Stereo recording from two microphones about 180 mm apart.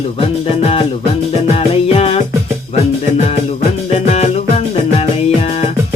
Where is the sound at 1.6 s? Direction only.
35° left (ahead or behind).